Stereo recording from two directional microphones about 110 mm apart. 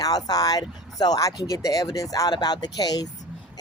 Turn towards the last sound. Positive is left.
turn(degrees=35)  # may be behind; listen again after turning